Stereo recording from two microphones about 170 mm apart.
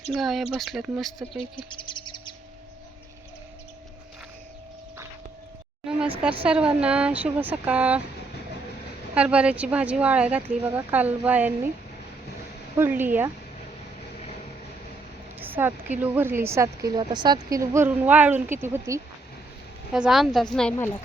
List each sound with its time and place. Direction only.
0.1 s a woman's voice: centre (ahead or behind)
1.4 s speech: 30° left (ahead or behind)
6.0 s speech: 5° right (ahead or behind)
9.1 s speech: 5° right (ahead or behind)
12.7 s speech: 15° right (ahead or behind)
15.4 s speech: 10° right (ahead or behind)
19.9 s a woman's voice: 5° right (ahead or behind)
20.7 s a woman's voice: 15° left (ahead or behind)